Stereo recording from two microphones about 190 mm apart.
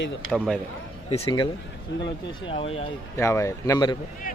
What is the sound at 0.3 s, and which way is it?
Speech, centre (ahead or behind).